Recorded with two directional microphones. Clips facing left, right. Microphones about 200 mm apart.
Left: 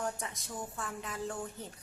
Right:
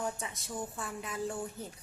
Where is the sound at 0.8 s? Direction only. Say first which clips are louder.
Right 2 dB; 10° right (ahead or behind).